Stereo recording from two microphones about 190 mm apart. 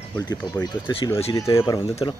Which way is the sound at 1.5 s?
15° left (ahead or behind).